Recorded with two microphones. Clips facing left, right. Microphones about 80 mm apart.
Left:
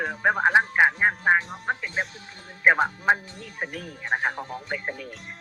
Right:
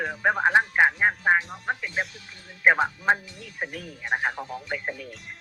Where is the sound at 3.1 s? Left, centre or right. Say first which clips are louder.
Left 1 dB; centre.